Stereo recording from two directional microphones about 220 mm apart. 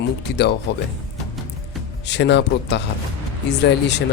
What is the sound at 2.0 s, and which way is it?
Speech, 50° left (ahead or behind).